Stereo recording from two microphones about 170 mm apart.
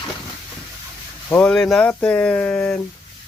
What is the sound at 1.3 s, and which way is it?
Speech, 10° left (ahead or behind).